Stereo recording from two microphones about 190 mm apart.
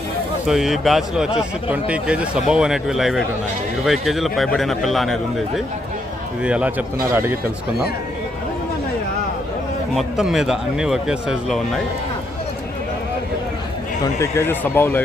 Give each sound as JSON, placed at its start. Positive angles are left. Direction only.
{"t": 0.4, "sound": "speech", "side_deg": 0}
{"t": 9.9, "sound": "speech", "side_deg": 0}
{"t": 14.0, "sound": "speech", "side_deg": 15}